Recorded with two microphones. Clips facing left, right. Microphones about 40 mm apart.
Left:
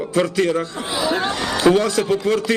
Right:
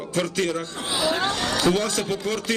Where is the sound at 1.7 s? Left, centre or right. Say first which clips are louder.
Left 7 dB; left.